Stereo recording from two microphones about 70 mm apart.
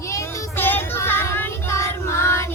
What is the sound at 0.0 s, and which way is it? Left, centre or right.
Child singing, left.